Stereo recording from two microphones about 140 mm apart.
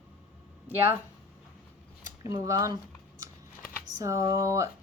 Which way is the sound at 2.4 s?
25° right (ahead or behind).